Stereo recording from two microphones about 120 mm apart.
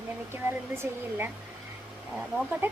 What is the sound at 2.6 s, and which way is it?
Speech, 15° right (ahead or behind).